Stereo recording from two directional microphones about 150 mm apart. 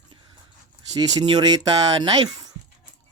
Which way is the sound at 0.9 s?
25° right (ahead or behind).